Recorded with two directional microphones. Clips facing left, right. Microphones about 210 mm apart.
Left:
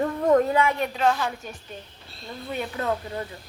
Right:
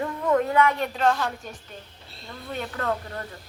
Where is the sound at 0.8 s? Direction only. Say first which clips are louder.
Even; 5° left (ahead or behind).